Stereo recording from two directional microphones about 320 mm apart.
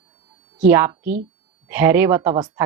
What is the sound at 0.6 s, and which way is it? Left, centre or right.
A woman's voice, centre.